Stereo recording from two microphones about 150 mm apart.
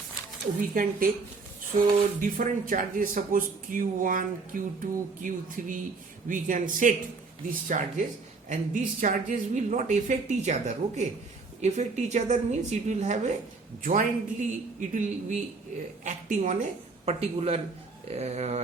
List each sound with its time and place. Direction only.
0.7 s a woman's voice: 70° right (ahead or behind)
2.2 s speech: 65° right (ahead or behind)
17.1 s speech: 40° right (ahead or behind)